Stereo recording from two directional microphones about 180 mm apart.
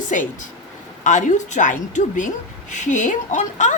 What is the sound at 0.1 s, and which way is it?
A woman's voice, 45° left (ahead or behind).